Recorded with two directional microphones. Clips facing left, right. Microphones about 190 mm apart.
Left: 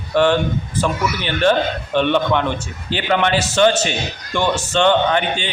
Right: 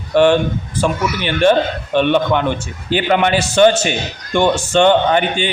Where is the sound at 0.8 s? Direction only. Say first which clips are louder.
Right 3 dB; 10° right (ahead or behind).